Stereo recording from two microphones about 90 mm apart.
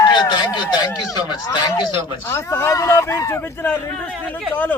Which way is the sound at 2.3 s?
30° left (ahead or behind).